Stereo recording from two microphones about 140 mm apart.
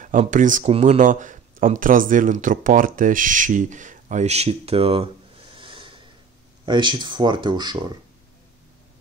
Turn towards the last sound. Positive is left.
turn(degrees=-30)  # may be behind; listen again after turning